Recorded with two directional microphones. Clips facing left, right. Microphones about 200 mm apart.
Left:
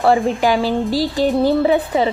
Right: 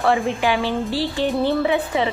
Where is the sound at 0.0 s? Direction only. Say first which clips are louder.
Left 4 dB; 35° left (ahead or behind).